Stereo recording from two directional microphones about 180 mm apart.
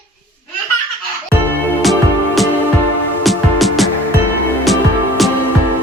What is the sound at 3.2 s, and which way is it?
Music, centre (ahead or behind).